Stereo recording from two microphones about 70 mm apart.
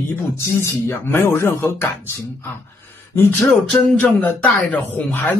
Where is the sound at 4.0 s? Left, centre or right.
Left.